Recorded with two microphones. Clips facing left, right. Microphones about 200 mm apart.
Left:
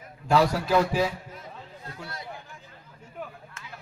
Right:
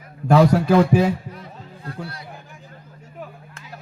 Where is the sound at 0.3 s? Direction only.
55° right (ahead or behind).